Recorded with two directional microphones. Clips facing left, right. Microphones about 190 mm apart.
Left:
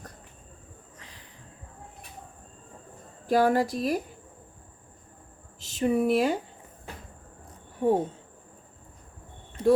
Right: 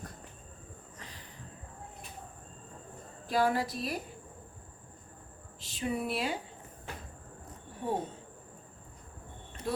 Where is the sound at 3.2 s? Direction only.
45° left (ahead or behind).